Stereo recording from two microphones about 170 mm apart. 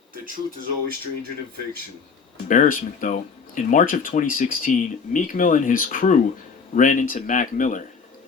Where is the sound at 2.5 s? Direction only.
55° left (ahead or behind).